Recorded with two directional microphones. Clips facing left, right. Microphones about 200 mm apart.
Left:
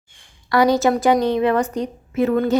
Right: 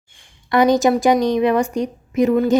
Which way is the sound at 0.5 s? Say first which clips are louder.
Right 2 dB; 20° right (ahead or behind).